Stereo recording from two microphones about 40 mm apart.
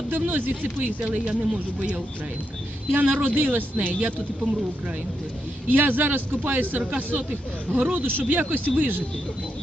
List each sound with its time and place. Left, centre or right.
0.1 s a man's voice: right
1.1 s speech: right
2.9 s a man's voice: right
5.6 s a man's voice: right
7.9 s a man's voice: right